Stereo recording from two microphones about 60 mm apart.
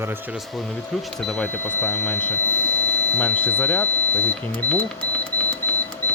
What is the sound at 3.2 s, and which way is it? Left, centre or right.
Speech, left.